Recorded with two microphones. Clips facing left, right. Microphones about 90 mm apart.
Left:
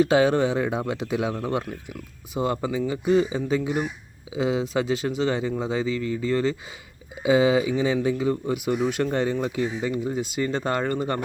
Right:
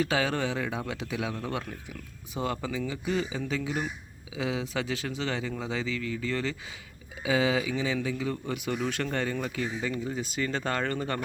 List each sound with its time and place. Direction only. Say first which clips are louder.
0.0 s speech: left 9 dB; 20° left (ahead or behind)